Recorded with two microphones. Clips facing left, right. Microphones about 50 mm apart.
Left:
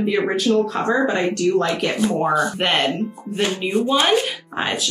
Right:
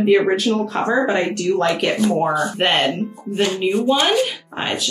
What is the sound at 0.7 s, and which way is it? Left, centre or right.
Speech, centre.